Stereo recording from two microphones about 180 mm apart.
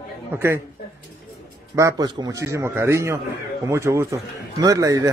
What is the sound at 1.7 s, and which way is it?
A man's voice, 20° right (ahead or behind).